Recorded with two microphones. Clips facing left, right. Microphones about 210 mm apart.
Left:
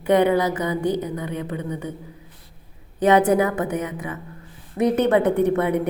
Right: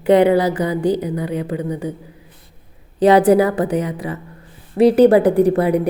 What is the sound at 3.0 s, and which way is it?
A woman's voice, 35° right (ahead or behind).